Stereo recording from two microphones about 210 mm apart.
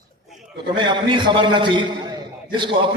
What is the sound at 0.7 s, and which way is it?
A man's voice, 20° right (ahead or behind).